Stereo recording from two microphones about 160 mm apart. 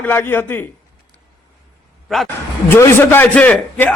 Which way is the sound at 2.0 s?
Centre (ahead or behind).